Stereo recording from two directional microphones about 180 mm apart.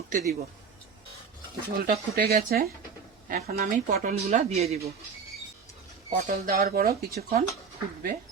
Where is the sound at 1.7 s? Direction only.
55° right (ahead or behind); by 4.9 s 35° right (ahead or behind).